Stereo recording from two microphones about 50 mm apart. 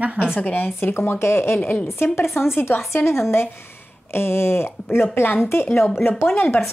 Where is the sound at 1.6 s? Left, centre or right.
Left.